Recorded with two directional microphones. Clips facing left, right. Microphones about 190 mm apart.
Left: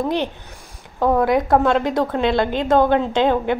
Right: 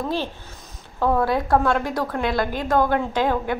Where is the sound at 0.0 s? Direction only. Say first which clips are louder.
Left 4 dB; 20° left (ahead or behind).